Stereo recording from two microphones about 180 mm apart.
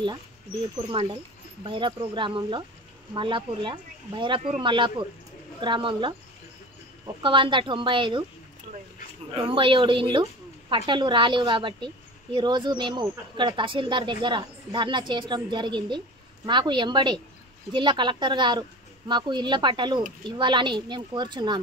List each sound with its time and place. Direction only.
1.6 s speech: 25° right (ahead or behind)
7.2 s speech: 25° right (ahead or behind)
9.3 s speech: 25° right (ahead or behind)